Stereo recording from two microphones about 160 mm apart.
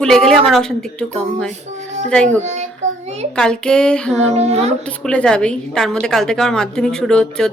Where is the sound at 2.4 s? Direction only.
45° right (ahead or behind).